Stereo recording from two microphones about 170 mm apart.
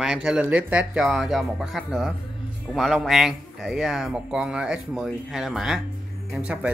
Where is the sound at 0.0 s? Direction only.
5° right (ahead or behind).